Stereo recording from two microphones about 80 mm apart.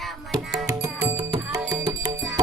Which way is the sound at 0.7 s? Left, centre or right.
Right.